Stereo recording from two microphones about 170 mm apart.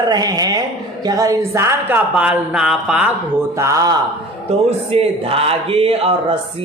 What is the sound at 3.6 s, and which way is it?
Speech, 20° right (ahead or behind).